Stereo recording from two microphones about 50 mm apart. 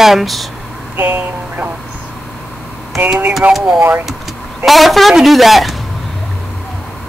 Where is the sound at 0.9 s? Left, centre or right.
Right.